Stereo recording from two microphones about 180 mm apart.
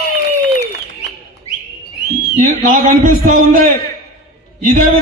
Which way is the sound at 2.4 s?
50° right (ahead or behind).